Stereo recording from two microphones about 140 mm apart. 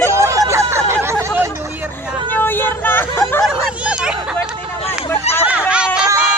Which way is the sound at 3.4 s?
5° right (ahead or behind).